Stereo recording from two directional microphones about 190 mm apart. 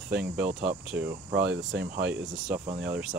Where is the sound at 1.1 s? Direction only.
60° right (ahead or behind).